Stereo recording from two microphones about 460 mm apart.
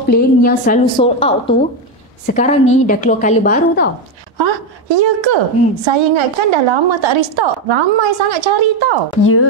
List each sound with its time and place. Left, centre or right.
0.1 s a woman's voice: centre
2.3 s a woman's voice: centre
4.4 s a woman's voice: right
5.9 s a woman's voice: right
9.2 s speech: left